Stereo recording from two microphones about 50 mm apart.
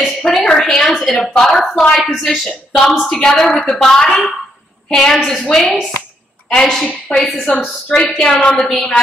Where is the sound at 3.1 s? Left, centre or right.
Centre.